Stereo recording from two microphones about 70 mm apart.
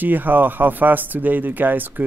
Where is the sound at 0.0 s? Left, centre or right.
Right.